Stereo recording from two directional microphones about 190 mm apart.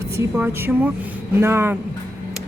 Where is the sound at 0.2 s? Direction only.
10° right (ahead or behind).